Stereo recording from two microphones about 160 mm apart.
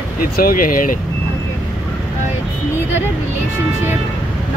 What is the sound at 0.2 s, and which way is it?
Speech, 65° left (ahead or behind).